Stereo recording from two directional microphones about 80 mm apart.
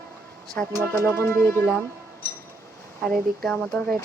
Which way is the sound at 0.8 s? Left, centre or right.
Left.